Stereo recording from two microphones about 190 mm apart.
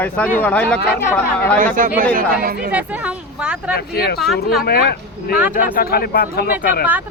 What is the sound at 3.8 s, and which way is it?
Speech, 55° left (ahead or behind).